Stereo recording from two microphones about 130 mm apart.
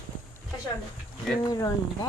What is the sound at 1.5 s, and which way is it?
Speech, 25° left (ahead or behind).